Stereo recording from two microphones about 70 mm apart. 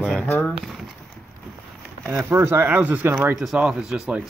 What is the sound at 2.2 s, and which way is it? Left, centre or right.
Speech, right.